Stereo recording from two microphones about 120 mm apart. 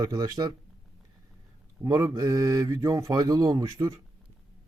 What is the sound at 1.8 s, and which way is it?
Speech, 25° right (ahead or behind).